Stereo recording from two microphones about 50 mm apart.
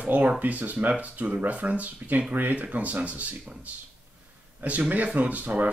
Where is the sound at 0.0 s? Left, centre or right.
Right.